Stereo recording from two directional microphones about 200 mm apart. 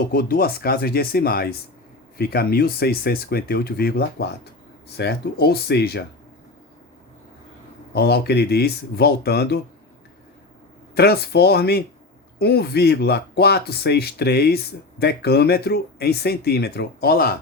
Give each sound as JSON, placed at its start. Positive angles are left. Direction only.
{"t": 0.1, "sound": "speech", "side_deg": 45}
{"t": 7.9, "sound": "speech", "side_deg": 50}
{"t": 10.9, "sound": "speech", "side_deg": 55}